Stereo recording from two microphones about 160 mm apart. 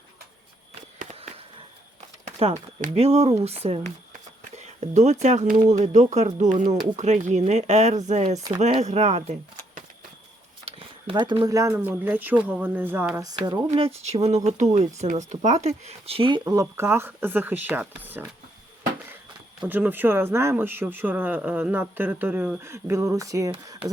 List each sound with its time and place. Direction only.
2.2 s speech: 45° right (ahead or behind)
10.7 s speech: 35° right (ahead or behind)
13.7 s speech: 40° right (ahead or behind); by 18.3 s 10° right (ahead or behind)
19.6 s speech: 10° right (ahead or behind)